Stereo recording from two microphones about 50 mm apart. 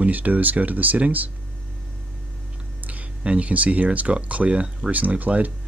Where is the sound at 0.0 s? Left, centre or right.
Right.